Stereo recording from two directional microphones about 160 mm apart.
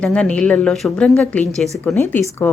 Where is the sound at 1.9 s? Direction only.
15° left (ahead or behind).